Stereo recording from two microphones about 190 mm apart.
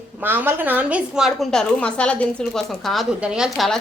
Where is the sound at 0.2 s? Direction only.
10° right (ahead or behind).